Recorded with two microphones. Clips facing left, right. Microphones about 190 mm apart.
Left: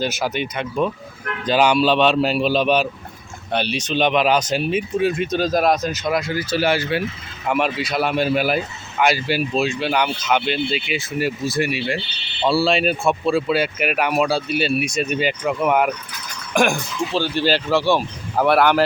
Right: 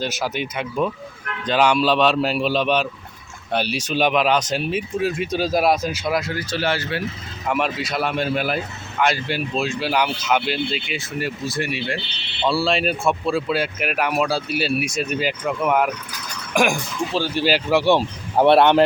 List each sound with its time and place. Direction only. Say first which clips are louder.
0.0 s speech: left 2 dB; centre (ahead or behind)
3.5 s speech: left 1 dB; 5° right (ahead or behind); by 7.0 s 10° left (ahead or behind)
7.4 s speech: left 2 dB; centre (ahead or behind); by 18.9 s 25° right (ahead or behind)